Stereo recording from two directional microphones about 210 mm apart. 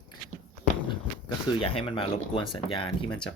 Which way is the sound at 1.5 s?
25° left (ahead or behind).